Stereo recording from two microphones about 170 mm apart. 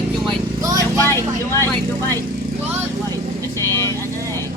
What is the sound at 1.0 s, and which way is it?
Vehicle, 15° left (ahead or behind).